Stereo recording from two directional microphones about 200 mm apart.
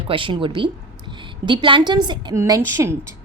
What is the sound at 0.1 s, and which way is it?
A woman's voice, 25° right (ahead or behind).